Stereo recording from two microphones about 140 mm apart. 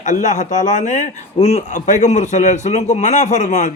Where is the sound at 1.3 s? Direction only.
50° left (ahead or behind).